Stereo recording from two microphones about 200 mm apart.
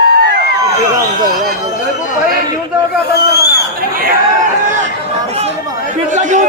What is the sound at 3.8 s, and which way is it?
Chatter, 50° right (ahead or behind).